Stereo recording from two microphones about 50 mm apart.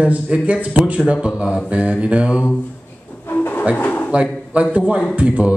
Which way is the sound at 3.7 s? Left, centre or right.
Left.